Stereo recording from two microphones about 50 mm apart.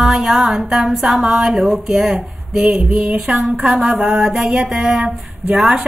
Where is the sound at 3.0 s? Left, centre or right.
Right.